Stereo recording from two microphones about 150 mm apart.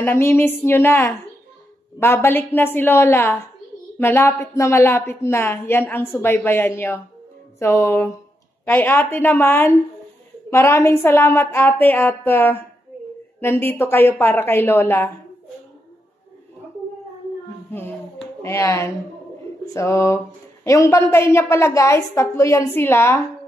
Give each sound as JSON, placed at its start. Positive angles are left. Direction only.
{"t": 0.0, "sound": "a woman's voice", "side_deg": 15}
{"t": 18.4, "sound": "a woman's voice", "side_deg": 20}